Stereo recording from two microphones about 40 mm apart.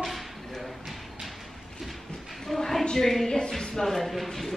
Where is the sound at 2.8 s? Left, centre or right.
Centre.